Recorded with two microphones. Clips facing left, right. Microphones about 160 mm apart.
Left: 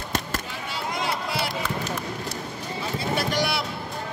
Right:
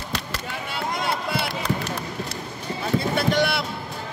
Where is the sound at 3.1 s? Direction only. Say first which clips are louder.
Right 2 dB; 55° right (ahead or behind).